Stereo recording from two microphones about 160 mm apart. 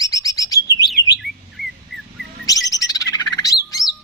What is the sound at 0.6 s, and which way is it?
Chirp, 20° left (ahead or behind).